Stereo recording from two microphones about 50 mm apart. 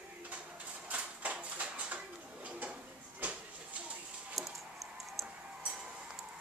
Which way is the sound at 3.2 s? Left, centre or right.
Right.